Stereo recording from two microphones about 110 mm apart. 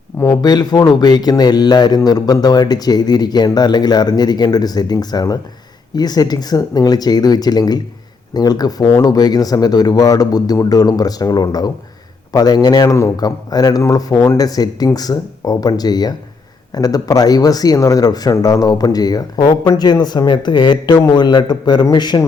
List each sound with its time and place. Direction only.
0.2 s speech: 35° left (ahead or behind)